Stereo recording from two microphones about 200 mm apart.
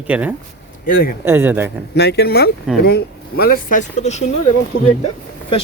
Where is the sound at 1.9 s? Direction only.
55° left (ahead or behind); by 4.3 s 35° left (ahead or behind).